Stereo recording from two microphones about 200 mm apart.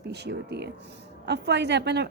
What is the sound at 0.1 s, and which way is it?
A woman's voice, 55° right (ahead or behind).